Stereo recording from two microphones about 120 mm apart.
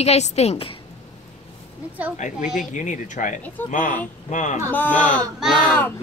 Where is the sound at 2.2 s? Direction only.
80° left.